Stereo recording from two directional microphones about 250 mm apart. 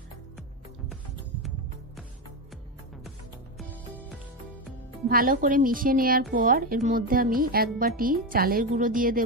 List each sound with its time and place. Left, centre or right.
5.0 s speech: right